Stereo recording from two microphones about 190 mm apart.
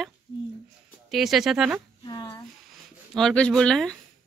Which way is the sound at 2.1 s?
20° left (ahead or behind).